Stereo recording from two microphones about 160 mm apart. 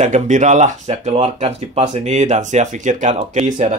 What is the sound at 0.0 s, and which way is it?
Speech, 50° right (ahead or behind).